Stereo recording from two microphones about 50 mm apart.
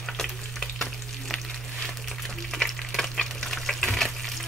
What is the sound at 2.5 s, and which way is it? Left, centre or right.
Stir, centre.